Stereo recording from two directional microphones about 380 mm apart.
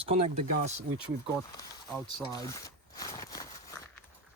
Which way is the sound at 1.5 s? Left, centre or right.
Centre.